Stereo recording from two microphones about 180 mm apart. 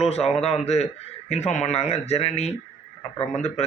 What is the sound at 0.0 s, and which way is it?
A man's voice, 35° left (ahead or behind).